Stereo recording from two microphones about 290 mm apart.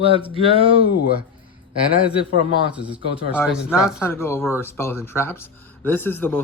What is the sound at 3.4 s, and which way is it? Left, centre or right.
Speech, centre.